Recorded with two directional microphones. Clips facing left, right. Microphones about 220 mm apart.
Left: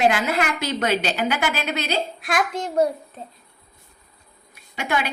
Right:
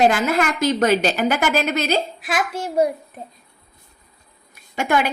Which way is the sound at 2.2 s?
5° right (ahead or behind).